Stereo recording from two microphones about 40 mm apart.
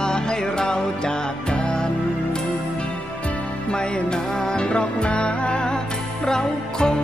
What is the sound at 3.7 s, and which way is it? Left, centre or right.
Music, left.